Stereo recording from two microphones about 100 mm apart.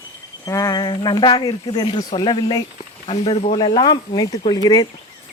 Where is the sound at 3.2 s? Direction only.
90° left.